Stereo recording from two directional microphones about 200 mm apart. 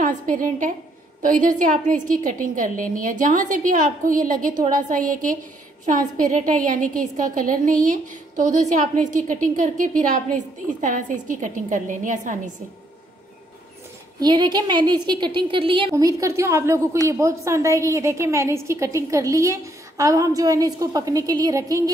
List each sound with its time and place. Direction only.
0.0 s a woman's voice: 40° right (ahead or behind)
14.2 s a woman's voice: 20° right (ahead or behind)